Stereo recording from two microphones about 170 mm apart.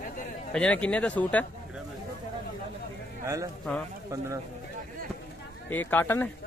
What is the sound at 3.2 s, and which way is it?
Speech, 20° right (ahead or behind).